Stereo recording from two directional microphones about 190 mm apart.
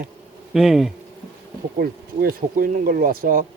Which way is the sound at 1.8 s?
50° right (ahead or behind).